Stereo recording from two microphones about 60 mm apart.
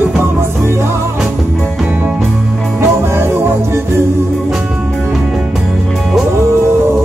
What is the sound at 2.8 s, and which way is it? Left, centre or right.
Music, right.